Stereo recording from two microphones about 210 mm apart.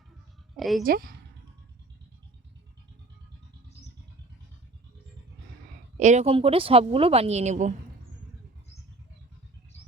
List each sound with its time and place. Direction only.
0.5 s speech: centre (ahead or behind)
0.9 s speech: 45° right (ahead or behind)
6.0 s speech: 35° right (ahead or behind)